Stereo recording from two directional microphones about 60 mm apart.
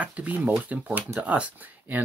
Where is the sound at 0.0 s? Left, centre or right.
Right.